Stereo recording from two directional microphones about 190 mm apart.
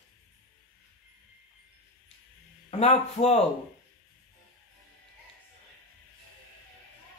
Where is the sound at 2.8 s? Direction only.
35° left (ahead or behind).